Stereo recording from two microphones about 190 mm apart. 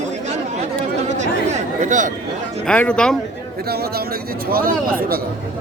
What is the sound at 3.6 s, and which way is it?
Speech, 55° right (ahead or behind).